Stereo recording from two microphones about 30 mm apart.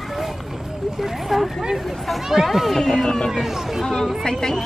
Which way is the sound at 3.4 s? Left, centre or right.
Centre.